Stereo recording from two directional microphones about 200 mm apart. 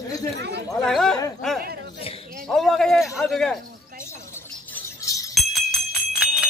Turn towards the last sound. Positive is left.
turn(degrees=0)  # may be behind; listen again after turning